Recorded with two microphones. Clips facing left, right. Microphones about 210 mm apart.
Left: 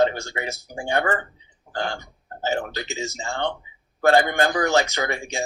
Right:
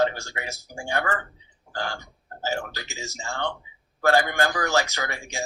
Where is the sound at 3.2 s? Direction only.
30° left (ahead or behind).